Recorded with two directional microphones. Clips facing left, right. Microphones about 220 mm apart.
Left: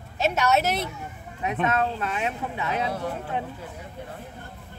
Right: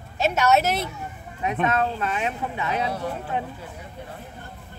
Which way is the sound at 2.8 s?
50° left (ahead or behind).